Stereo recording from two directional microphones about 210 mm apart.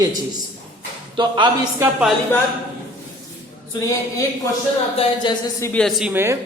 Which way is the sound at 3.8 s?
15° left (ahead or behind).